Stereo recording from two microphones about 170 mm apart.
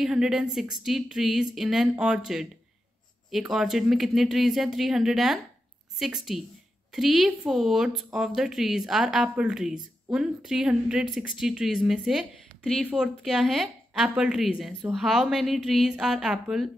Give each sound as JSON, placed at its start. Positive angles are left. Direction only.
{"t": 0.0, "sound": "a woman's voice", "side_deg": -5}